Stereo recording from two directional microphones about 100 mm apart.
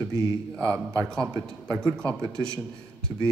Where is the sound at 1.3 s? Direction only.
10° left (ahead or behind).